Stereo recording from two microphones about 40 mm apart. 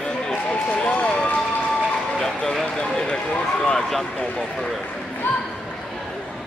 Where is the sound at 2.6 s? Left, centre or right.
Centre.